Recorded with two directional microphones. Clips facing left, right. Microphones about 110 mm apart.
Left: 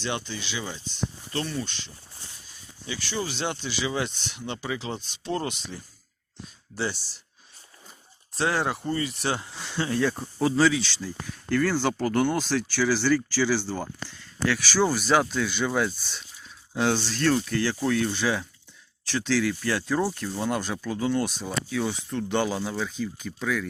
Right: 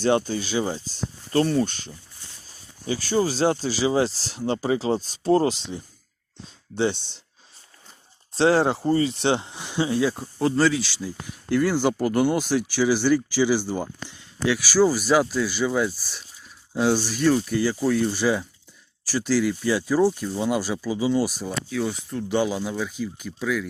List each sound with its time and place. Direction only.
0.0 s speech: 45° right (ahead or behind); by 7.2 s 25° right (ahead or behind)
8.4 s speech: 30° right (ahead or behind); by 23.6 s 5° right (ahead or behind)